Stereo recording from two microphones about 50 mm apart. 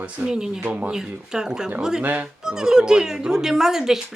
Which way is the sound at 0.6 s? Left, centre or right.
Right.